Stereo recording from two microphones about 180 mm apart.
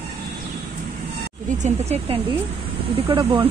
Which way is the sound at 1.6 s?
35° right (ahead or behind).